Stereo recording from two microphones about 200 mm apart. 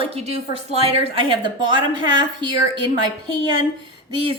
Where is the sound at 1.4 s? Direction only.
25° right (ahead or behind).